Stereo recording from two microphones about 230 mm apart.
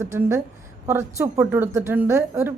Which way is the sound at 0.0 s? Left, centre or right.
Centre.